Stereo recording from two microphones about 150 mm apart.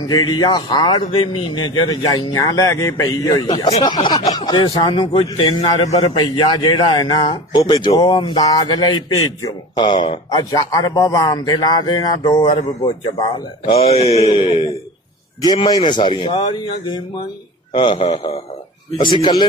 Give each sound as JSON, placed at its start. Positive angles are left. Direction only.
{"t": 0.0, "sound": "a man's voice", "side_deg": 25}
{"t": 10.5, "sound": "a man's voice", "side_deg": 25}
{"t": 15.4, "sound": "speech", "side_deg": 25}